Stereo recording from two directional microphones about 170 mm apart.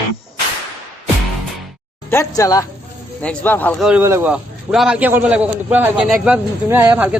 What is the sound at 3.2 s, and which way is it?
Speech, 10° left (ahead or behind).